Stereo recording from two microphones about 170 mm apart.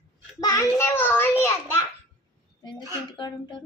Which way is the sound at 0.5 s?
10° left (ahead or behind).